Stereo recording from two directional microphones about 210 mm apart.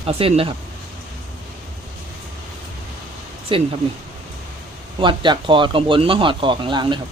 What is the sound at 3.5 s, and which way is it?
Speech, 25° right (ahead or behind).